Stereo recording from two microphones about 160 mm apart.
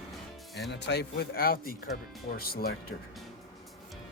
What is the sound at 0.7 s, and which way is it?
Speech, 90° left.